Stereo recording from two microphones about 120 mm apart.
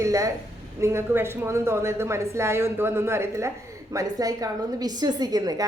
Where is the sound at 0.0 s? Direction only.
25° right (ahead or behind).